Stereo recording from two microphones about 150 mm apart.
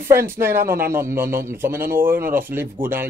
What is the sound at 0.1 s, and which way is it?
A man's voice, 15° right (ahead or behind).